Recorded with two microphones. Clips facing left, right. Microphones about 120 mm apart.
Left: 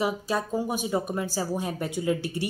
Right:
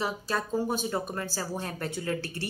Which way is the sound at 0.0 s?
15° left (ahead or behind).